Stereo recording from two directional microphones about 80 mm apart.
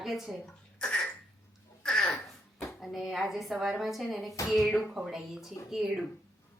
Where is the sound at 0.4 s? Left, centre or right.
Centre.